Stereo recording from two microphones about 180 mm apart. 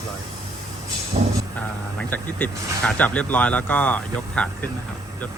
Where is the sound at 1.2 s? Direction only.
35° right (ahead or behind).